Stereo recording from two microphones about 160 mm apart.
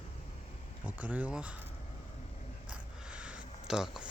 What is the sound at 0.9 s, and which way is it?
Speech, 10° right (ahead or behind).